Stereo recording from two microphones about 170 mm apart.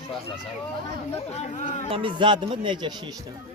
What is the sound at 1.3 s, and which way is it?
Speech, 45° left (ahead or behind).